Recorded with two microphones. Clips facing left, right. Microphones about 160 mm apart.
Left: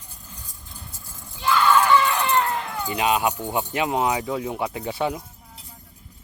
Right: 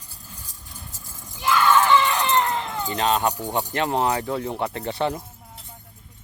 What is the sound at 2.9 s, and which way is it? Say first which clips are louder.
Speech: even; 10° left (ahead or behind).